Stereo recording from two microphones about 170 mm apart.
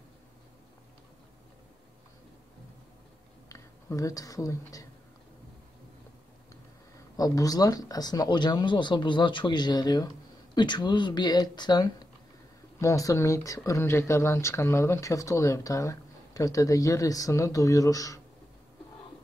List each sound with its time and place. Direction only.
3.4 s speech: 20° left (ahead or behind)
7.2 s speech: 20° left (ahead or behind)